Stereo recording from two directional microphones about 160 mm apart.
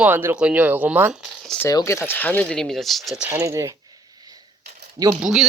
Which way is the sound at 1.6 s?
20° left (ahead or behind).